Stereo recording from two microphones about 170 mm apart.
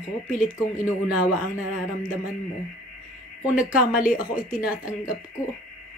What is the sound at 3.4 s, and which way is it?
Speech, 5° right (ahead or behind).